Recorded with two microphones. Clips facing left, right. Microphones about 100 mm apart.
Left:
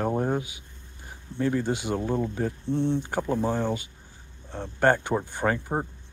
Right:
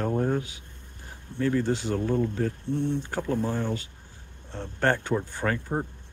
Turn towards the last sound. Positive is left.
turn(degrees=20)  # may be behind; listen again after turning